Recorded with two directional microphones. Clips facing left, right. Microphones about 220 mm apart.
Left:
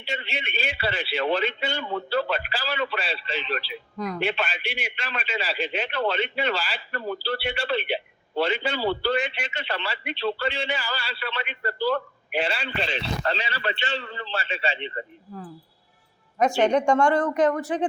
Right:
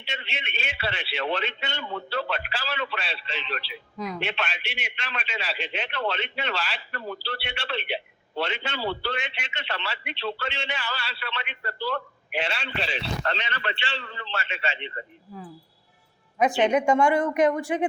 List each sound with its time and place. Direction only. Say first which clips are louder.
0.0 s a man's voice: left 5 dB; centre (ahead or behind)
13.3 s a man's voice: left 2 dB; 35° left (ahead or behind)
16.6 s speech: left 1 dB; 5° right (ahead or behind)